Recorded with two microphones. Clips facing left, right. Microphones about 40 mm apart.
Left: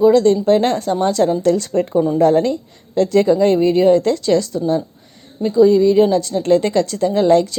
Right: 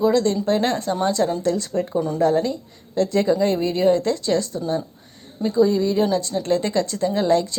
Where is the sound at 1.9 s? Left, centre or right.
Left.